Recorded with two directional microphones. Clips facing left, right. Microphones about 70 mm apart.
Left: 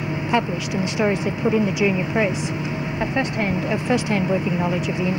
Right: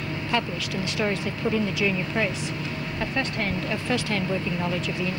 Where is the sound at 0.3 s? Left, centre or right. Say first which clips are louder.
Left 5 dB; centre.